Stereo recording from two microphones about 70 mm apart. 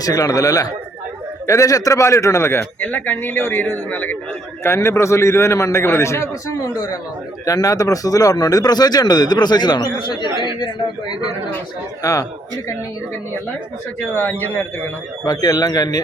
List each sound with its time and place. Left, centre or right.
0.0 s a man's voice: left
4.6 s a man's voice: left
6.5 s speech: left
12.0 s a man's voice: left
14.1 s a man's voice: left
15.2 s speech: left